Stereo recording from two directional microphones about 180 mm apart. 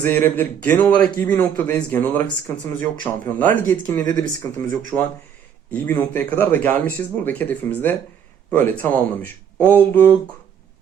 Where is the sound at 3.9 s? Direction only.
20° left (ahead or behind).